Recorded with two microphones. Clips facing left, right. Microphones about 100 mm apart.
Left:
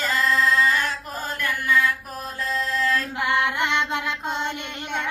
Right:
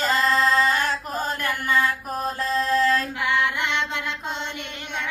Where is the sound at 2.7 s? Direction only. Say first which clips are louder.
Right 6 dB; 35° right (ahead or behind).